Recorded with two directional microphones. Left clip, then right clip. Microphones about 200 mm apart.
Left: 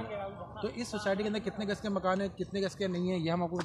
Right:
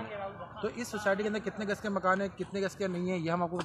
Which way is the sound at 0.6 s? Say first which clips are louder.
Right 2 dB; 5° right (ahead or behind).